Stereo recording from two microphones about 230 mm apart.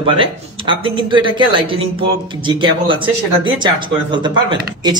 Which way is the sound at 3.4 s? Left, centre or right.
Centre.